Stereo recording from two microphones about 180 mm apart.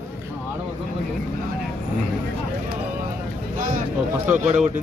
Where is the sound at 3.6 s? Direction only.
50° right (ahead or behind).